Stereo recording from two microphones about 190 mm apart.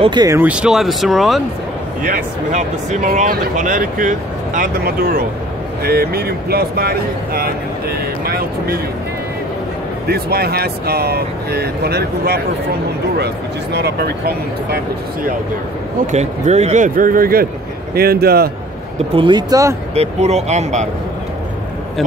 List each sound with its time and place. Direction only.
0.0 s speech: 20° right (ahead or behind)
0.4 s speech: 5° right (ahead or behind)
2.0 s speech: 45° right (ahead or behind)
10.0 s speech: 55° right (ahead or behind)
13.7 s speech: 60° right (ahead or behind)
16.1 s speech: 35° right (ahead or behind); by 18.5 s 55° right (ahead or behind)
19.1 s speech: 25° right (ahead or behind)
19.9 s speech: 35° right (ahead or behind)